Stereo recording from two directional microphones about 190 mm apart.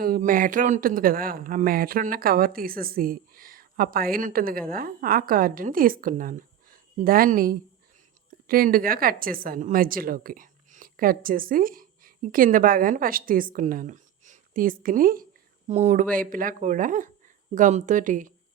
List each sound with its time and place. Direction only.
0.0 s speech: 45° right (ahead or behind)